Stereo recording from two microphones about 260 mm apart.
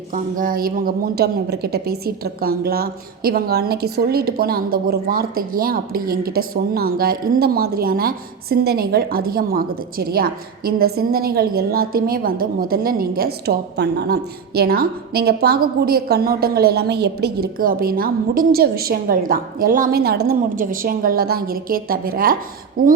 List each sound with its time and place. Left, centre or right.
0.1 s speech: right